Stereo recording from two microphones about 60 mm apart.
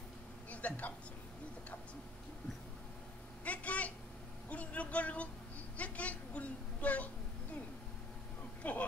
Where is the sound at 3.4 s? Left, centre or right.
Left.